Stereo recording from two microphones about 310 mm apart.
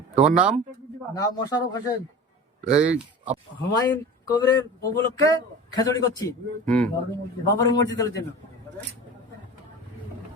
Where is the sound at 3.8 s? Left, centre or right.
Centre.